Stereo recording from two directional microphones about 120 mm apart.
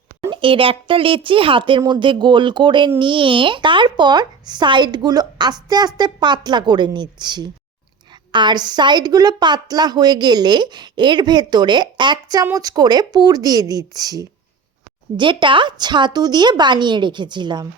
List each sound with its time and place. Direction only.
0.3 s a woman's voice: 45° right (ahead or behind)
15.1 s a woman's voice: 40° right (ahead or behind)